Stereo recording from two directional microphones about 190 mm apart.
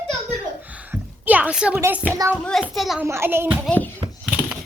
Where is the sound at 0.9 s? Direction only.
10° right (ahead or behind).